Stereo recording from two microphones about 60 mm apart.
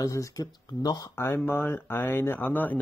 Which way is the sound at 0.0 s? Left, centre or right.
Left.